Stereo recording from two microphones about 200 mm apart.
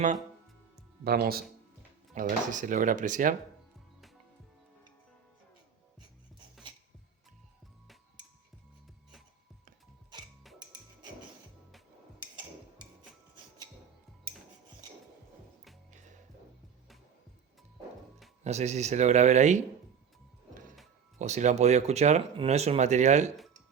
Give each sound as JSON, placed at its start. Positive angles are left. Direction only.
{"t": 1.0, "sound": "speech", "side_deg": -50}
{"t": 15.9, "sound": "music", "side_deg": -35}
{"t": 18.4, "sound": "speech", "side_deg": -35}
{"t": 21.2, "sound": "speech", "side_deg": -35}